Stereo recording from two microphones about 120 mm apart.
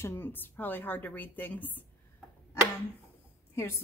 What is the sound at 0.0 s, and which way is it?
A woman's voice, 20° left (ahead or behind).